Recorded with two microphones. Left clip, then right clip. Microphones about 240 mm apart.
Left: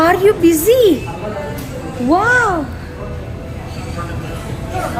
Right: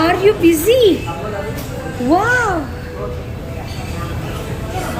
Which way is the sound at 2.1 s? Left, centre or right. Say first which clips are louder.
Left 2 dB; centre.